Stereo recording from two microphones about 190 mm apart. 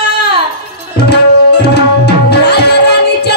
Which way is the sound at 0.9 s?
60° left (ahead or behind).